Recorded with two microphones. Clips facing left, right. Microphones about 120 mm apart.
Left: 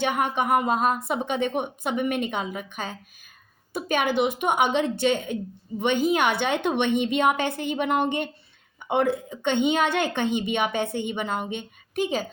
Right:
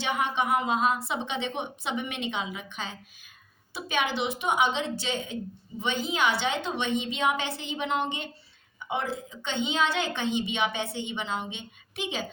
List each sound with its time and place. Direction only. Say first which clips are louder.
0.0 s a woman's voice: left 4 dB; 50° left (ahead or behind)